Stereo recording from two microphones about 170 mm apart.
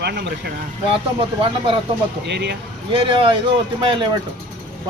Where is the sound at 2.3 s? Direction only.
80° right.